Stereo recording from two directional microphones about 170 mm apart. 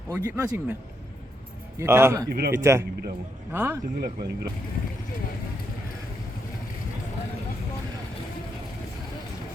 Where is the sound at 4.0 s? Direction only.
65° right (ahead or behind).